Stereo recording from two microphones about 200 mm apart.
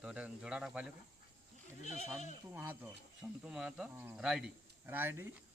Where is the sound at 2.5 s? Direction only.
10° right (ahead or behind).